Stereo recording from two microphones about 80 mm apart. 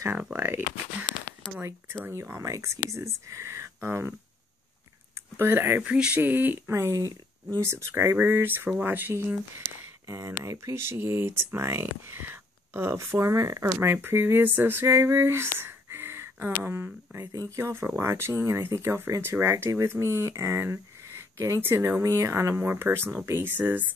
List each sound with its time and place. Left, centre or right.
0.4 s a sound: right
2.0 s speech: right
5.4 s speech: right
5.8 s speech: centre
6.7 s speech: right
10.0 s speech: right
14.0 s a sound: right
17.2 s speech: right
22.0 s speech: right